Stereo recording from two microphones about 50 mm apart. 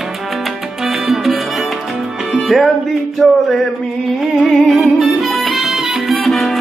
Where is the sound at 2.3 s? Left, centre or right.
Centre.